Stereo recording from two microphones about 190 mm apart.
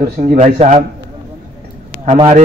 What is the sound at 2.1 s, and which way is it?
Speech, 30° right (ahead or behind).